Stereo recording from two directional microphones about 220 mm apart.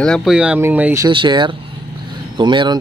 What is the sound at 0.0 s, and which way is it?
Speech, centre (ahead or behind).